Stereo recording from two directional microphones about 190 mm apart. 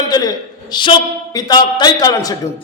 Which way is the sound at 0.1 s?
20° left (ahead or behind).